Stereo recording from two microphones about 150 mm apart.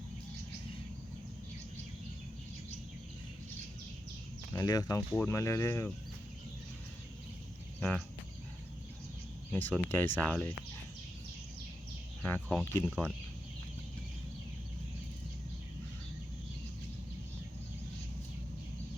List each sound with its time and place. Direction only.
4.5 s speech: 25° left (ahead or behind)
7.8 s cricket: 10° left (ahead or behind)
9.5 s speech: 10° left (ahead or behind)
12.2 s speech: 10° left (ahead or behind)